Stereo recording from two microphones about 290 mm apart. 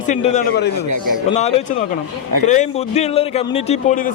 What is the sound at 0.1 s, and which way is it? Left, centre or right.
A man's voice, left.